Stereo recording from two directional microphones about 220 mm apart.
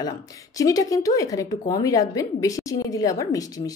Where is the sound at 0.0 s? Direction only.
15° left (ahead or behind).